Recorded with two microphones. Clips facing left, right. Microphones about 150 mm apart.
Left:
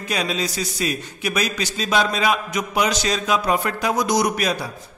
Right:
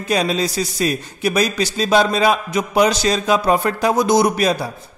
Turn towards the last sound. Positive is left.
turn(degrees=-35)  # may be behind; listen again after turning